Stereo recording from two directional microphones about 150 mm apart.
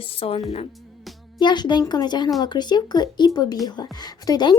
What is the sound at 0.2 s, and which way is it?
Speech, 40° left (ahead or behind).